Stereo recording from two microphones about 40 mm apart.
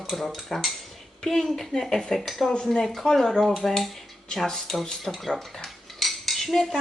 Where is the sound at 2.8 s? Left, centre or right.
Centre.